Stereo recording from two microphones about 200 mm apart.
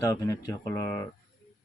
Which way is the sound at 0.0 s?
15° left (ahead or behind).